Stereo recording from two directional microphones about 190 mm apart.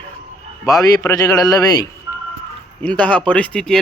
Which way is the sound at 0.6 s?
20° left (ahead or behind).